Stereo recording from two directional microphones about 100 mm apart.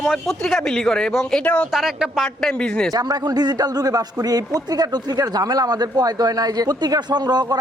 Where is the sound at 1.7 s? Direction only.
5° right (ahead or behind).